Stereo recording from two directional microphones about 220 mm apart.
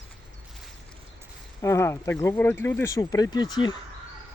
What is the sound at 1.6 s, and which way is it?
Speech, 10° left (ahead or behind).